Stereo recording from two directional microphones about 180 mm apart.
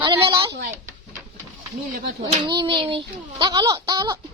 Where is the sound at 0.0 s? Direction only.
25° right (ahead or behind).